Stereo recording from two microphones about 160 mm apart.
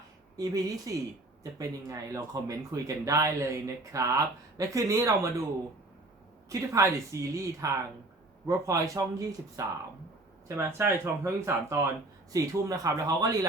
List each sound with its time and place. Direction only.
0.3 s speech: 20° right (ahead or behind)
6.5 s speech: 20° right (ahead or behind)
10.7 s speech: 15° right (ahead or behind)